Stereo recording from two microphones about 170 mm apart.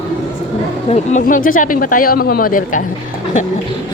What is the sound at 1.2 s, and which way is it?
Speech, 55° left (ahead or behind).